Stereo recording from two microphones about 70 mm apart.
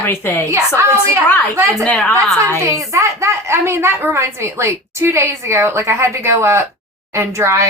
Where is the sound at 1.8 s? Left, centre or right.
Centre.